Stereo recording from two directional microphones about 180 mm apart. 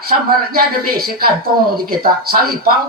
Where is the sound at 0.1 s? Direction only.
55° right (ahead or behind).